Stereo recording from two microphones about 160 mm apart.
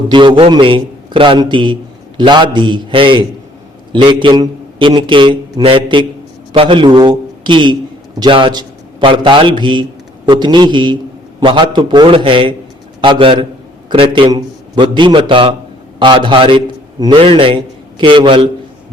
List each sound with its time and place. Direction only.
0.1 s a man's voice: 30° right (ahead or behind)